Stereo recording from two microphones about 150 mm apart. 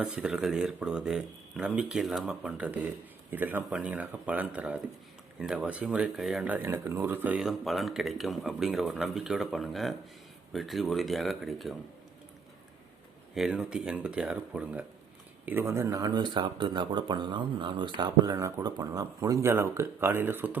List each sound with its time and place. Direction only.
0.0 s speech: 5° right (ahead or behind)
13.3 s speech: 5° right (ahead or behind)